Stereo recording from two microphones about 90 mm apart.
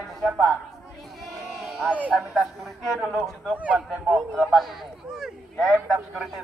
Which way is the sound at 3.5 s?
15° right (ahead or behind).